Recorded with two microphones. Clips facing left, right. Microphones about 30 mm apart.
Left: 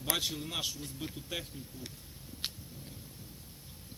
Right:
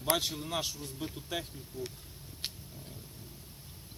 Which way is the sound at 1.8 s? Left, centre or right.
Right.